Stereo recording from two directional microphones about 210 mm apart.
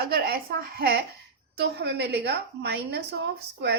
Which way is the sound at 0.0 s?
50° right (ahead or behind).